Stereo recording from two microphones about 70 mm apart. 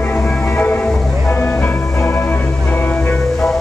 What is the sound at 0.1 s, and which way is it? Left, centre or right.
Music, left.